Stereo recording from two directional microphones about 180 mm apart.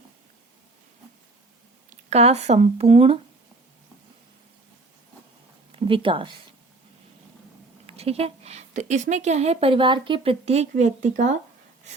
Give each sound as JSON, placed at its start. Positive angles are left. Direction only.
{"t": 2.0, "sound": "speech", "side_deg": -35}
{"t": 5.7, "sound": "speech", "side_deg": -30}
{"t": 7.9, "sound": "speech", "side_deg": -35}